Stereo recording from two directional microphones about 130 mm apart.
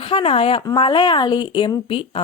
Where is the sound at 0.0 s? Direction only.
45° left (ahead or behind).